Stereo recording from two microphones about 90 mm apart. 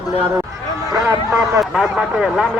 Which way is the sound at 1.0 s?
35° right (ahead or behind).